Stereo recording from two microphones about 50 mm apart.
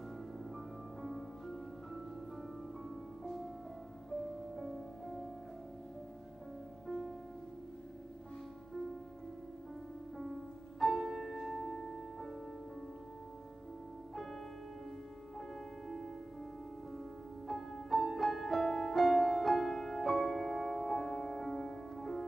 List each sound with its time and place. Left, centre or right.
3.3 s music: centre
6.9 s music: centre
10.1 s music: centre
14.1 s music: centre
17.5 s music: centre